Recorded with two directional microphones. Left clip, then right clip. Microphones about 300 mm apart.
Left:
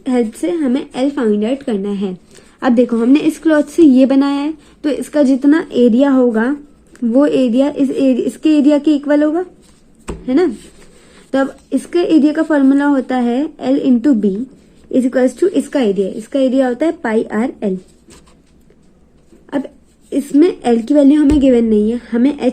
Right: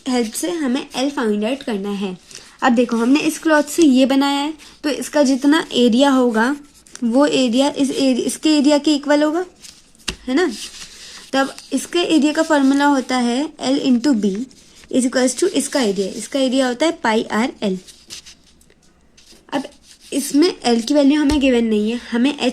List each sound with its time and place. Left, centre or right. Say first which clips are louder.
0.0 s speech: left 4 dB; right
10.2 s speech: left 4 dB; centre; by 17.7 s right
19.5 s speech: left 3 dB; centre
21.2 s speech: left 5 dB; centre